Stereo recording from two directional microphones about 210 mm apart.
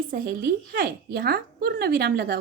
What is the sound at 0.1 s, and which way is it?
A woman's voice, 45° right (ahead or behind).